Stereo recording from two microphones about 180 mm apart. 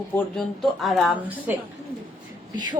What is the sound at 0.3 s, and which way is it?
A woman's voice, centre (ahead or behind).